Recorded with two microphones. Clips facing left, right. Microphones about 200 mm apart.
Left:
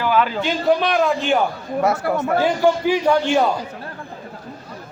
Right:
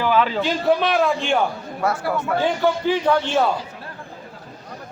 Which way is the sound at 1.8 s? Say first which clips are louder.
Left 3 dB; 20° left (ahead or behind).